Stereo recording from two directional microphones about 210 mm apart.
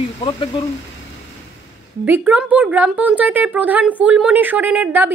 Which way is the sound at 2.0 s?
10° right (ahead or behind).